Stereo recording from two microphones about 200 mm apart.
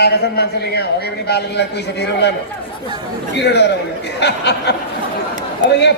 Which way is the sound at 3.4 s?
55° left (ahead or behind).